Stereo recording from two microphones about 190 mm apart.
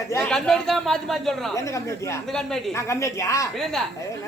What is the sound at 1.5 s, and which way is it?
Speech, 15° left (ahead or behind).